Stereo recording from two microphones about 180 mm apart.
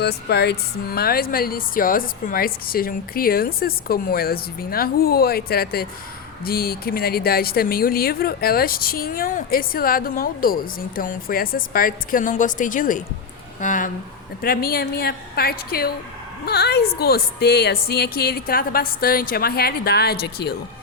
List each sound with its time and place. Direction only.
0.0 s speech: 65° left (ahead or behind)